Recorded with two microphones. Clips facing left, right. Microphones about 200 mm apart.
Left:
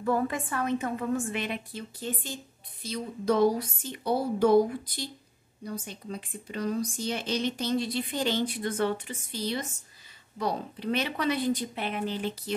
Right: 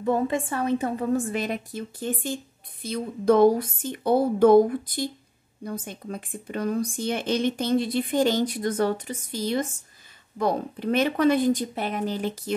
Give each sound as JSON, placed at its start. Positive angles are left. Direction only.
{"t": 0.0, "sound": "a woman's voice", "side_deg": -25}